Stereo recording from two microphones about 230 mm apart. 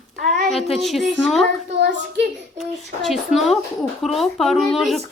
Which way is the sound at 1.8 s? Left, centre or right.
Right.